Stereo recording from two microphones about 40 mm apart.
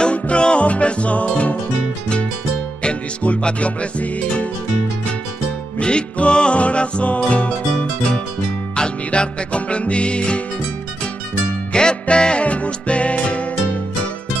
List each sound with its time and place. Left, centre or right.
0.0 s music: left
2.8 s music: left
5.8 s music: left
8.7 s music: left
11.7 s music: left